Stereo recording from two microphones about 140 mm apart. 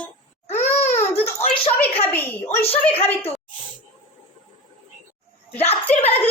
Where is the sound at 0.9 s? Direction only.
15° left (ahead or behind).